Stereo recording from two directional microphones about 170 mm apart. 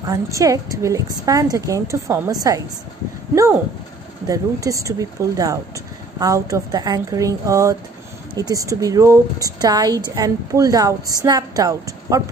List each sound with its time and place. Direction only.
0.0 s a woman's voice: 20° right (ahead or behind)
4.3 s a woman's voice: 20° right (ahead or behind)